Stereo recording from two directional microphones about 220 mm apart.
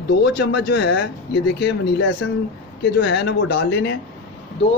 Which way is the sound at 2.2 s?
60° left (ahead or behind).